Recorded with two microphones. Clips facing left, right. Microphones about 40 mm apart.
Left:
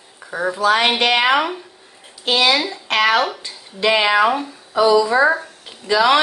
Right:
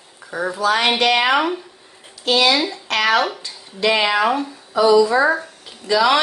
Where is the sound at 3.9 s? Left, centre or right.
Left.